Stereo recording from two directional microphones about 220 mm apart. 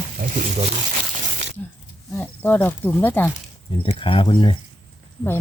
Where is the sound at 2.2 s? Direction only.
10° left (ahead or behind).